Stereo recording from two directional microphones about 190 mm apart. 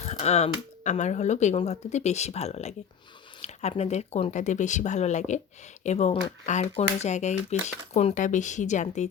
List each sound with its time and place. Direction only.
0.0 s speech: 35° left (ahead or behind)